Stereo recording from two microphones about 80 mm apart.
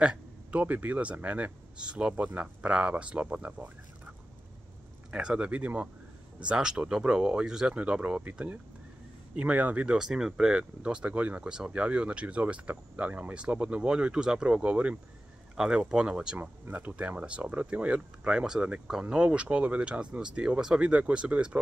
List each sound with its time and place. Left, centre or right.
0.0 s speech: centre
5.1 s speech: centre
16.3 s speech: right